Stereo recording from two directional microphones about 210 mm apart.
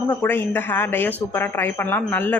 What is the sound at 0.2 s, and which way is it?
Speech, 10° left (ahead or behind).